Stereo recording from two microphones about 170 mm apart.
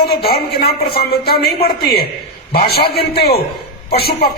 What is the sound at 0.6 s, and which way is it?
Speech, 65° left (ahead or behind).